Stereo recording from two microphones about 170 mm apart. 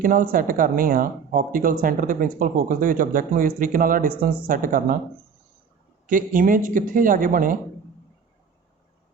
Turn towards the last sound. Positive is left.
turn(degrees=-55)  # may be behind; listen again after turning